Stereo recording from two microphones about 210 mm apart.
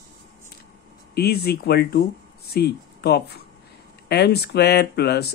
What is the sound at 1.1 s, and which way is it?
Speech, 50° left (ahead or behind).